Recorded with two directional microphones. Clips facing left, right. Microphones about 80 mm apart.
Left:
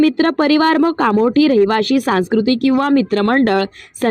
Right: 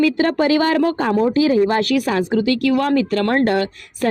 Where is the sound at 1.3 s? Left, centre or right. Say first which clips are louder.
Left 4 dB; centre.